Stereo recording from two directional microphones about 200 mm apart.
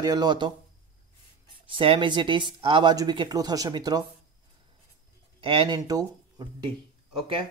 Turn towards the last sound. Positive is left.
turn(degrees=-25)  # may be behind; listen again after turning